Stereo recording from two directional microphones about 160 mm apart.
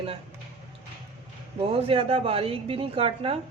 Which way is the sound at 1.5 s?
35° right (ahead or behind).